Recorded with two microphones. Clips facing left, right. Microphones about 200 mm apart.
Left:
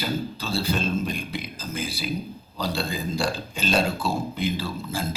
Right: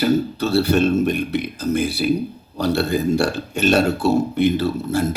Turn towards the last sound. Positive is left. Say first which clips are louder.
# right 10 dB
turn(degrees=-70)  # may be behind; listen again after turning